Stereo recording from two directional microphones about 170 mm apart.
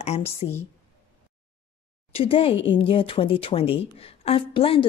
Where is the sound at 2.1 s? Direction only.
35° left (ahead or behind).